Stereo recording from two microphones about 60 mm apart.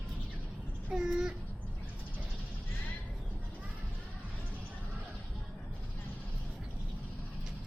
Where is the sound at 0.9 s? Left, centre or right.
Centre.